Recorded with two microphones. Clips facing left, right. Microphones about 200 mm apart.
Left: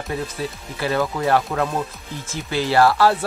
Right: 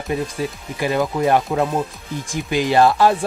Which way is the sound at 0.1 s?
15° right (ahead or behind).